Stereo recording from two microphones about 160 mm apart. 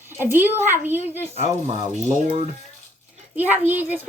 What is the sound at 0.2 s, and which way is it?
Speech, 15° right (ahead or behind).